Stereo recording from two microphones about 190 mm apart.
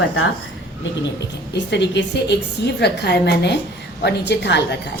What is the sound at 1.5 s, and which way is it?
A woman's voice, 65° left (ahead or behind).